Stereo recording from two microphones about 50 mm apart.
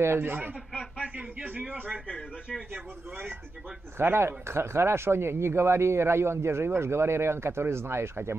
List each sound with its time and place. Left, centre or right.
0.0 s speech: right
1.1 s a man's voice: right
4.0 s speech: right